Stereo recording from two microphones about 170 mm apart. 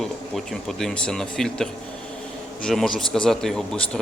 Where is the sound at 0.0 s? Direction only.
Centre (ahead or behind).